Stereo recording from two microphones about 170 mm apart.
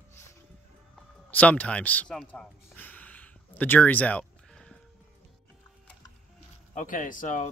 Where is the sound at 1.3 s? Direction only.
10° left (ahead or behind).